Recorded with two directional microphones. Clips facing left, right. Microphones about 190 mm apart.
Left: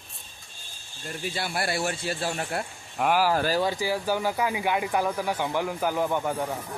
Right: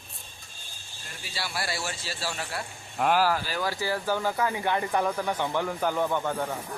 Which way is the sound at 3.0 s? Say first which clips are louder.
Left 1 dB; 10° left (ahead or behind).